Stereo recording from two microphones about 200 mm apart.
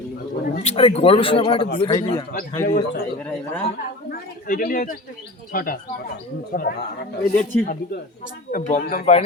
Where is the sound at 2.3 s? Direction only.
45° left (ahead or behind).